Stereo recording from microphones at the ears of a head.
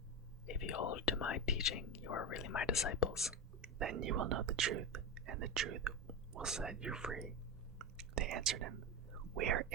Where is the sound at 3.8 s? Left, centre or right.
Right.